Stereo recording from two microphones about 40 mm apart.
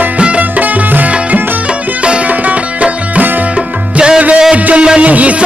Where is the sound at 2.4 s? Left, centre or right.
Right.